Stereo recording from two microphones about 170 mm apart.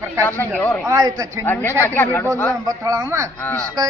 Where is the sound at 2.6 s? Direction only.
20° right (ahead or behind).